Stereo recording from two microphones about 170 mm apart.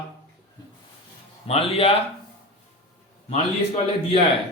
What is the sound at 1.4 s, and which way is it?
Speech, 35° left (ahead or behind).